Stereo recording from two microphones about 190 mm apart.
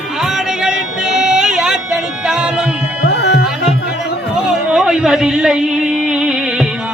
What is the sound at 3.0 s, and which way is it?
Music, 60° left (ahead or behind).